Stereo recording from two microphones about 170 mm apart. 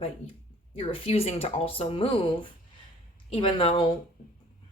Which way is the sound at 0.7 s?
35° left (ahead or behind).